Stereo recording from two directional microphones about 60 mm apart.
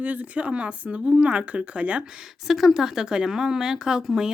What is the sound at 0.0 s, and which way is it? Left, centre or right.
Speech, right.